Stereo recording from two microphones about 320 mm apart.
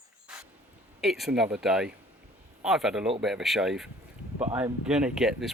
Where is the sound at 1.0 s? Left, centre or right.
Centre.